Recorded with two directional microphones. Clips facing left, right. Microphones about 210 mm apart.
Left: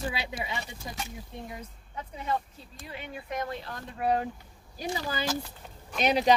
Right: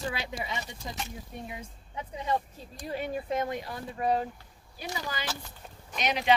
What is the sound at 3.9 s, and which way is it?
Speech, 5° left (ahead or behind).